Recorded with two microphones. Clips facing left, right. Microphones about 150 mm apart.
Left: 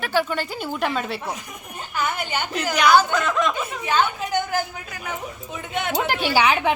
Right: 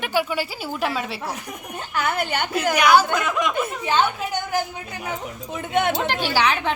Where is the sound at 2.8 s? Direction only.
10° right (ahead or behind).